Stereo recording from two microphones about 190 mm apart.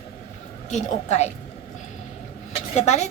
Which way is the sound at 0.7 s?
35° left (ahead or behind).